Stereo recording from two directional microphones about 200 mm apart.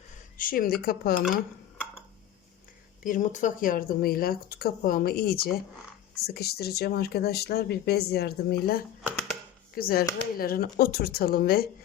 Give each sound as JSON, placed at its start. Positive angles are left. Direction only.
{"t": 0.3, "sound": "speech", "side_deg": 45}
{"t": 3.0, "sound": "speech", "side_deg": 40}